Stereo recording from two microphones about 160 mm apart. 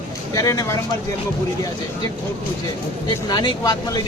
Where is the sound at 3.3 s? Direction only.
30° left (ahead or behind).